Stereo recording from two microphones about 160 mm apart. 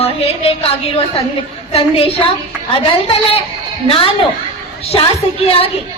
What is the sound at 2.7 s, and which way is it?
A woman's voice, 35° left (ahead or behind).